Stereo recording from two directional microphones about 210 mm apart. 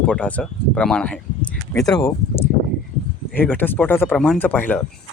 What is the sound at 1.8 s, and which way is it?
Speech, 15° left (ahead or behind).